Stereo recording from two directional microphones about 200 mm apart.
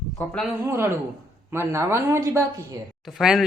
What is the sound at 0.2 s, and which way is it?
Speech, 10° left (ahead or behind).